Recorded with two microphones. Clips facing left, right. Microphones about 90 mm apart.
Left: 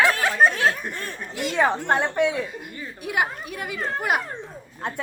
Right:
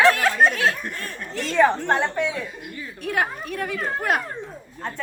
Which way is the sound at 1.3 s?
15° left (ahead or behind).